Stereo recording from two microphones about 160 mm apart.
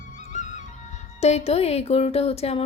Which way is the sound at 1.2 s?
40° left (ahead or behind).